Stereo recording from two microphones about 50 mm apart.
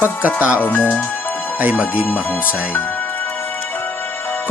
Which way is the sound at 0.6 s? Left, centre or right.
Left.